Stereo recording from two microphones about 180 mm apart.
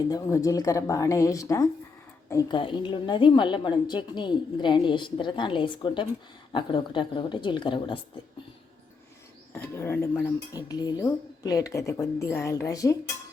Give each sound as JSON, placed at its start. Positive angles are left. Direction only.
{"t": 0.1, "sound": "a woman's voice", "side_deg": 20}
{"t": 9.6, "sound": "speech", "side_deg": 15}